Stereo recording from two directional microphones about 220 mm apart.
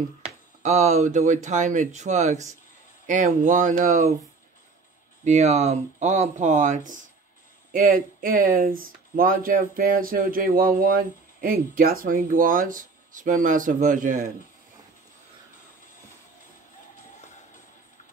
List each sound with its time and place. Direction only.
0.2 s speech: 30° right (ahead or behind)
5.2 s speech: 30° right (ahead or behind)
16.9 s music: 30° left (ahead or behind)